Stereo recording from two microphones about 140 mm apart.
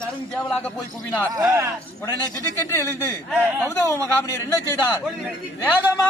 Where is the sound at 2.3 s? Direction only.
20° left (ahead or behind).